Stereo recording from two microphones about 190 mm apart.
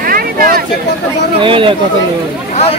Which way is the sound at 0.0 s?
50° right (ahead or behind).